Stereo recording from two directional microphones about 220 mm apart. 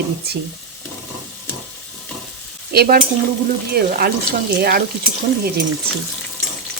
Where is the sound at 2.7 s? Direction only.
45° right (ahead or behind).